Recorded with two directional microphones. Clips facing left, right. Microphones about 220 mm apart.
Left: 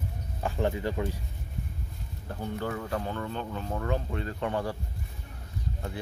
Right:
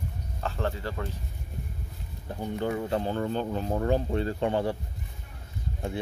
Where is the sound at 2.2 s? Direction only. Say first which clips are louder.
Right 3 dB; 20° right (ahead or behind).